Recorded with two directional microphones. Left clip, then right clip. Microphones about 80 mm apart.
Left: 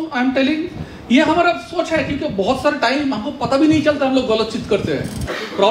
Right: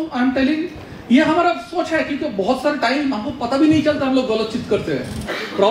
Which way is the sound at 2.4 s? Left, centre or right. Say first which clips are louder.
Left 2 dB; left.